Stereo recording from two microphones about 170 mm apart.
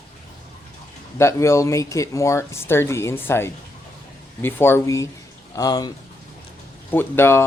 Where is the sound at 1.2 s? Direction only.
15° left (ahead or behind).